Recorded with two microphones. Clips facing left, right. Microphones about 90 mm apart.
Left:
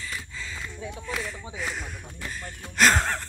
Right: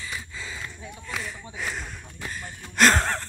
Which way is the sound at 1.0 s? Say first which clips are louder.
Even; centre (ahead or behind).